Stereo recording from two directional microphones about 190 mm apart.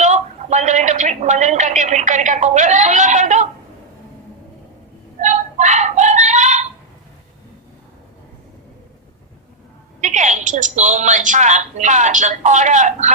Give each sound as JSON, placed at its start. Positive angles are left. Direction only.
{"t": 0.0, "sound": "a woman's voice", "side_deg": -40}
{"t": 5.2, "sound": "a sound", "side_deg": -40}
{"t": 10.0, "sound": "a woman's voice", "side_deg": -40}